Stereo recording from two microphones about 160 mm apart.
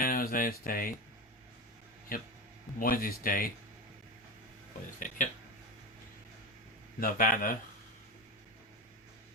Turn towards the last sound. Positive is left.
turn(degrees=60)  # may be behind; listen again after turning